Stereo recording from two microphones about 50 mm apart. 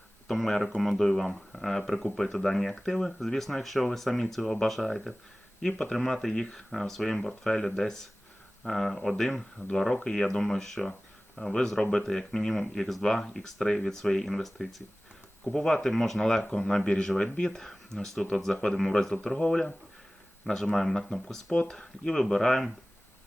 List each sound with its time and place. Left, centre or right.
0.3 s speech: centre
5.6 s speech: centre
9.6 s speech: centre